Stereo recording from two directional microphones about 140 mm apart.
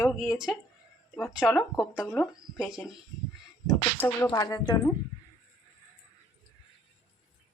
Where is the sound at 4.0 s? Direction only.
15° left (ahead or behind).